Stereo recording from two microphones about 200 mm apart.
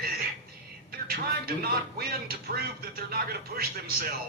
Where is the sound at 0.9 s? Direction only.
50° right (ahead or behind).